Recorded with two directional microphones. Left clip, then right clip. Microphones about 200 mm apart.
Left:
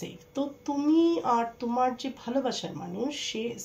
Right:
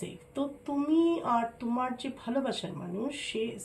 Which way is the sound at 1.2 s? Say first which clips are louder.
Left 3 dB; 40° left (ahead or behind).